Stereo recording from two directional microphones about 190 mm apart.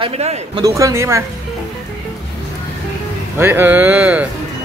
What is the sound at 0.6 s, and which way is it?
Speech, 15° right (ahead or behind).